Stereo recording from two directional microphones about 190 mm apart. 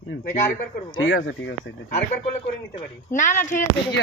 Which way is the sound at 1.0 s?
70° left (ahead or behind).